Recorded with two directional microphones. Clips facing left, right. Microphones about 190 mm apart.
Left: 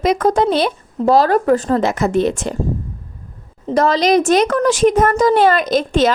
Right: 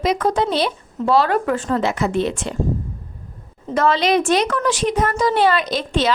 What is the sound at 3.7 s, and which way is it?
A woman's voice, 40° left (ahead or behind).